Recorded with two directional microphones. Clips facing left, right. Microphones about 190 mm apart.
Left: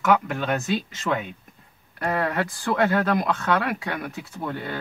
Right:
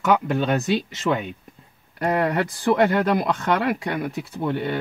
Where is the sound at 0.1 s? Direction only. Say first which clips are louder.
Right 2 dB; 20° right (ahead or behind).